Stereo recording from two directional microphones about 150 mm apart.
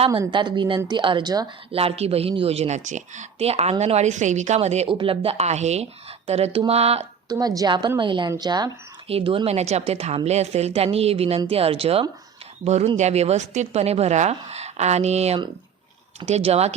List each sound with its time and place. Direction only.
0.1 s a woman's voice: 30° right (ahead or behind)
1.7 s speech: 40° right (ahead or behind)
4.9 s speech: 35° right (ahead or behind)
7.3 s a woman's voice: 25° right (ahead or behind)
9.0 s speech: 40° right (ahead or behind)